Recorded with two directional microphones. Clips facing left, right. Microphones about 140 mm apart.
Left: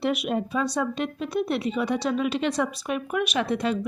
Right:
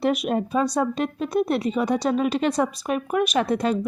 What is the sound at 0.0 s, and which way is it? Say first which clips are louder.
Speech: right 3 dB; 40° right (ahead or behind).